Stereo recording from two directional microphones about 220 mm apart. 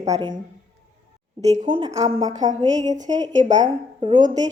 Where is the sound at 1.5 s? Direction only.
25° right (ahead or behind).